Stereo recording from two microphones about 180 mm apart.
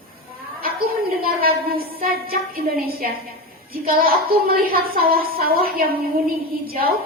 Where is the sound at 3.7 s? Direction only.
55° right (ahead or behind).